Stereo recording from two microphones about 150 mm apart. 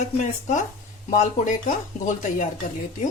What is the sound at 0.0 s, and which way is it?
Speech, 55° left (ahead or behind).